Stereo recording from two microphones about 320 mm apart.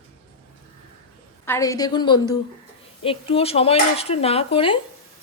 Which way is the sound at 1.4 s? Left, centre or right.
Centre.